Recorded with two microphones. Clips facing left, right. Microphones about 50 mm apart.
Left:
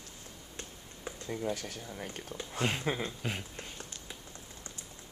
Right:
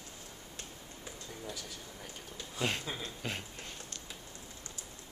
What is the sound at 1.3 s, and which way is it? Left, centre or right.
Speech, left.